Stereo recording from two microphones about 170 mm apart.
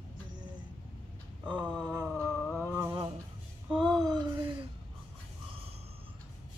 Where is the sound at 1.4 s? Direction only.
25° right (ahead or behind).